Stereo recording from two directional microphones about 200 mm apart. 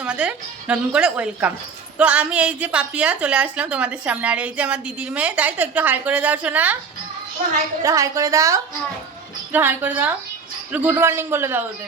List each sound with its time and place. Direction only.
0.0 s a woman's voice: 5° right (ahead or behind)
7.8 s a woman's voice: 15° right (ahead or behind)